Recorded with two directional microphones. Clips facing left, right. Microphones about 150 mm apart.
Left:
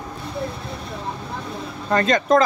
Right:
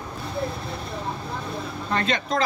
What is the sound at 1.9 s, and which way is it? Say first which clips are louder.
Speech: left 8 dB; 45° left (ahead or behind).